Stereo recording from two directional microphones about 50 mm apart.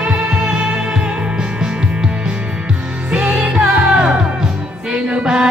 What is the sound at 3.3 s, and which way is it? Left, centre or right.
Music, centre.